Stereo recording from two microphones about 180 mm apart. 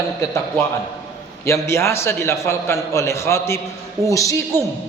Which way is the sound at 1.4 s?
15° left (ahead or behind).